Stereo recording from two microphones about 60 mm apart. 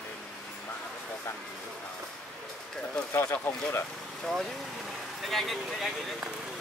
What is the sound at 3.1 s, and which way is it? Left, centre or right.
Speech, left.